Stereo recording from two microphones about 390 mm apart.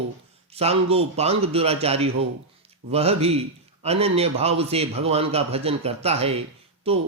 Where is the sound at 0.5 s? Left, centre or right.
Centre.